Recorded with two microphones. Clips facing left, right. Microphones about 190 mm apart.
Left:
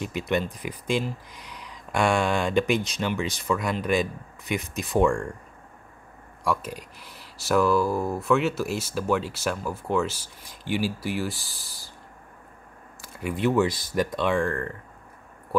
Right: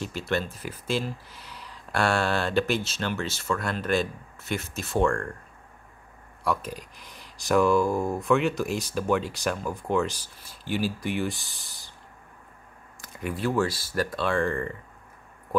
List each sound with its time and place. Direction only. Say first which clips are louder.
0.0 s speech: left 2 dB; centre (ahead or behind)
0.4 s speech: left 3 dB; 15° left (ahead or behind)
3.2 s speech: left 3 dB; centre (ahead or behind)
6.4 s speech: left 1 dB; 10° left (ahead or behind)
13.0 s a sound: left 1 dB; 5° left (ahead or behind)
13.6 s speech: left 3 dB; 15° left (ahead or behind)
14.4 s speech: even; centre (ahead or behind)